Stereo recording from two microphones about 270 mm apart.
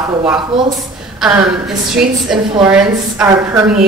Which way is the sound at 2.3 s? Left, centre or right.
Centre.